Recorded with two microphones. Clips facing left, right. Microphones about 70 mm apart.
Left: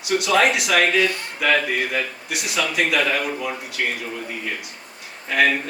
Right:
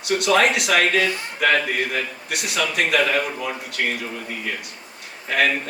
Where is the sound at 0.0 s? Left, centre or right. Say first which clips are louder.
Even; right.